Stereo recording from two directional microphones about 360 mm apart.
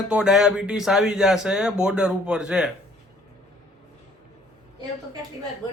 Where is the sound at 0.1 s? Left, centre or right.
Centre.